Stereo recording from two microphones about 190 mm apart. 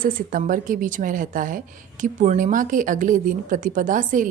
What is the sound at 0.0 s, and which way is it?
A woman's voice, 45° right (ahead or behind).